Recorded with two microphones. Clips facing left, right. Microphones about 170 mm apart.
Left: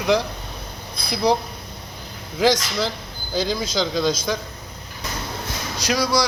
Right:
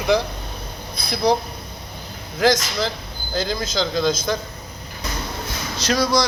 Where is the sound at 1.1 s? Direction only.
10° left (ahead or behind).